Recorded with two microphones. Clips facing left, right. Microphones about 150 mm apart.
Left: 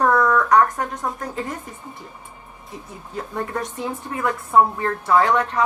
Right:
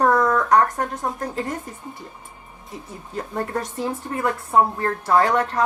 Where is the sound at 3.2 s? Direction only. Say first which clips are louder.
Right 1 dB; 45° right (ahead or behind).